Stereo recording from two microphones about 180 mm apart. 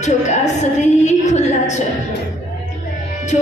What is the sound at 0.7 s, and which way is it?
Music, 40° left (ahead or behind).